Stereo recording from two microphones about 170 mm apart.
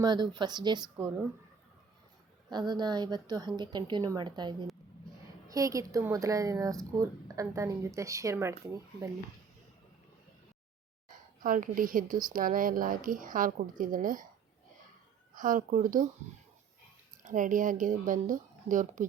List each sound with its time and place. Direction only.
0.0 s speech: 25° right (ahead or behind)
2.5 s speech: 25° right (ahead or behind)
11.4 s speech: 55° right (ahead or behind)
15.4 s speech: 50° right (ahead or behind)
17.2 s speech: 50° right (ahead or behind)